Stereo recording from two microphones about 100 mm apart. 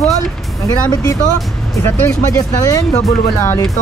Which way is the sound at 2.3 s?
35° left (ahead or behind).